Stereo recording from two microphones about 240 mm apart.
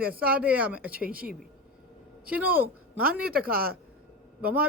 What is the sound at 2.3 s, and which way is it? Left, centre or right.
Speech, centre.